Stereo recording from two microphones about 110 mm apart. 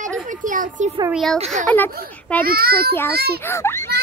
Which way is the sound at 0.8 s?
90° right.